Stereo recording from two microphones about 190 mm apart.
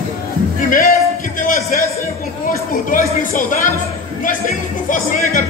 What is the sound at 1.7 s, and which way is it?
A man's voice, 45° left (ahead or behind).